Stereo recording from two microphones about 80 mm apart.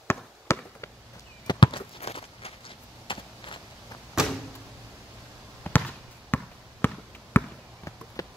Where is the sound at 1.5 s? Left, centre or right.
Left.